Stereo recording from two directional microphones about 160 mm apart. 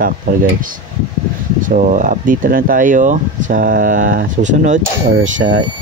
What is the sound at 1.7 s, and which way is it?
Speech, 50° right (ahead or behind).